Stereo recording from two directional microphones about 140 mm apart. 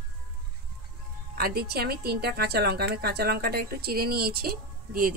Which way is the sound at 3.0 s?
90° right.